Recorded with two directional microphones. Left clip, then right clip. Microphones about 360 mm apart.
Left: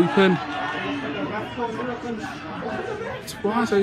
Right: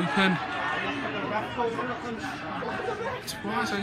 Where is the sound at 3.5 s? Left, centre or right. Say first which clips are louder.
Left 6 dB; centre.